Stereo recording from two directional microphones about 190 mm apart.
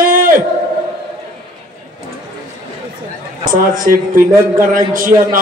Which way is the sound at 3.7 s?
45° right (ahead or behind).